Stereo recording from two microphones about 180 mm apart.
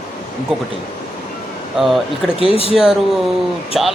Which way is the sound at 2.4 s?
30° left (ahead or behind).